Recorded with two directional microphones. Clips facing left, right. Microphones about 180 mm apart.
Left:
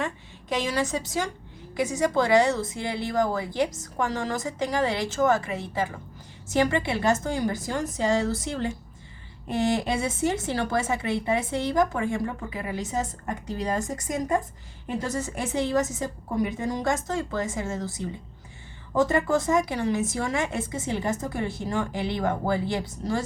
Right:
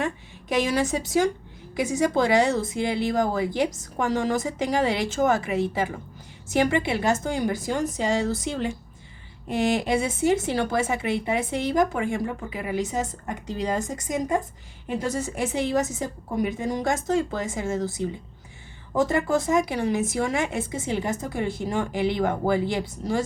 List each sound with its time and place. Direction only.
0.0 s a woman's voice: 10° right (ahead or behind)
18.9 s a woman's voice: 10° right (ahead or behind)